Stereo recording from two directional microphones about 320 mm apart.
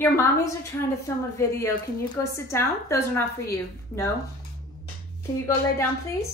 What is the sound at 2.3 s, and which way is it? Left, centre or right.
A woman's voice, centre.